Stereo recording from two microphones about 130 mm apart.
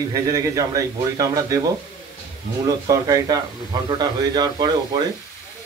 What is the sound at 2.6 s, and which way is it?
A man's voice, 30° right (ahead or behind).